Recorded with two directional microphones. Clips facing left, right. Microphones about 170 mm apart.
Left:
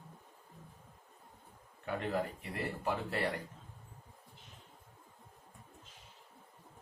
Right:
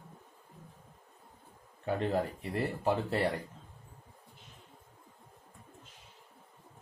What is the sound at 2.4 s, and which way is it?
Speech, 30° right (ahead or behind).